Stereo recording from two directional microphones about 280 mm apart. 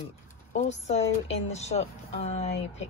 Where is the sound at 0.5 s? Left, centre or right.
Left.